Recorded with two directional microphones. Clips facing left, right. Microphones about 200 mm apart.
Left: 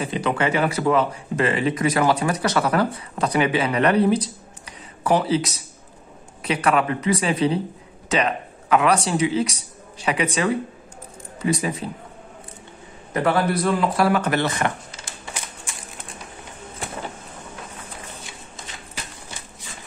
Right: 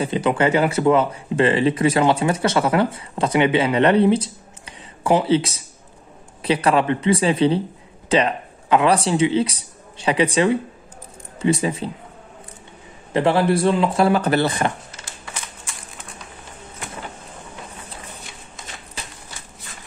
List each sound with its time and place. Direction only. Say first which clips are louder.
0.0 s speech: right 4 dB; 30° right (ahead or behind)
13.1 s speech: right 3 dB; 25° right (ahead or behind)